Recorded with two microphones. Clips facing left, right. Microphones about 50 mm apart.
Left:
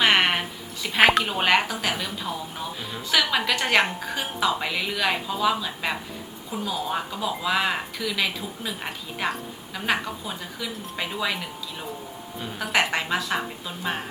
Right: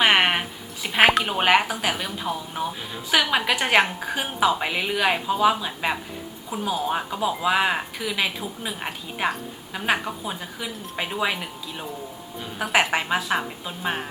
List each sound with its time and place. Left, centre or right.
0.0 s music: centre
1.3 s speech: centre
4.6 s a woman's voice: right
12.8 s speech: centre